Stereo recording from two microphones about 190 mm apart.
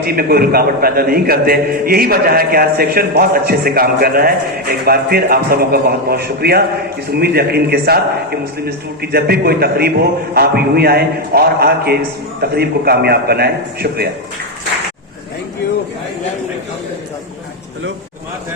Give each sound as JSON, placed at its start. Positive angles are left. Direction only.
{"t": 0.0, "sound": "a man's voice", "side_deg": -55}